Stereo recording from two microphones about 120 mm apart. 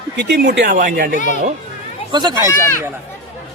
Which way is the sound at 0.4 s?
90° right.